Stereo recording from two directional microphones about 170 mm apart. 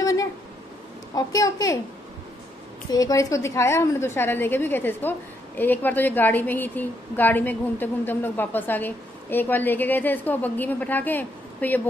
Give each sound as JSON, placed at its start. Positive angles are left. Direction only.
{"t": 0.0, "sound": "a sound", "side_deg": 20}
{"t": 1.1, "sound": "a woman's voice", "side_deg": 20}
{"t": 2.9, "sound": "a woman's voice", "side_deg": 20}